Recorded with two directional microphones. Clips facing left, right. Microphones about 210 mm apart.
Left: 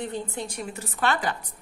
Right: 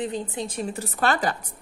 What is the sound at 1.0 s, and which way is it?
Speech, 40° right (ahead or behind).